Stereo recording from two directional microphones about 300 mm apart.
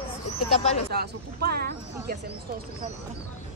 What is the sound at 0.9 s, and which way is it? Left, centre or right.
Speech, right.